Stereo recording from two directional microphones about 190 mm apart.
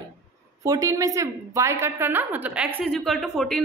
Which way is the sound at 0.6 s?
20° right (ahead or behind).